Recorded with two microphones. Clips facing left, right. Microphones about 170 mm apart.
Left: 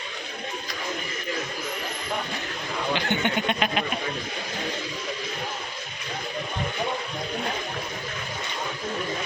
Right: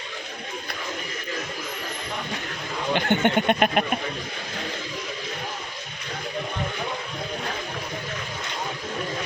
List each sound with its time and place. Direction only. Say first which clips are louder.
2.9 s speech: right 5 dB; 55° right (ahead or behind)